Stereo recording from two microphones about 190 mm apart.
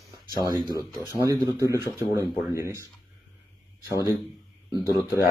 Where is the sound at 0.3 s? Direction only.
20° left (ahead or behind).